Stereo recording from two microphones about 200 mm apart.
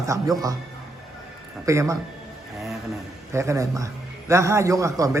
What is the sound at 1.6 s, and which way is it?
Speech, 15° right (ahead or behind).